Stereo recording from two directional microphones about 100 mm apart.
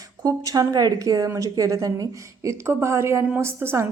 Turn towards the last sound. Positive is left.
turn(degrees=-25)  # may be behind; listen again after turning